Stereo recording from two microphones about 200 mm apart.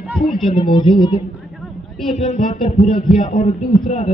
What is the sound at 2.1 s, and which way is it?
A man's voice, 35° left (ahead or behind).